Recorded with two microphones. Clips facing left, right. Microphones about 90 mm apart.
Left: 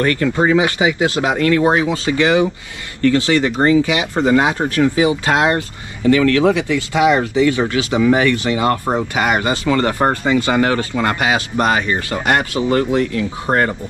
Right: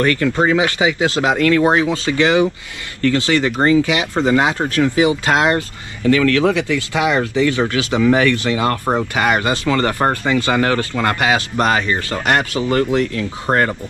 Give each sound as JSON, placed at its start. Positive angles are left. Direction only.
{"t": 0.0, "sound": "speech", "side_deg": 30}
{"t": 0.5, "sound": "speech", "side_deg": 15}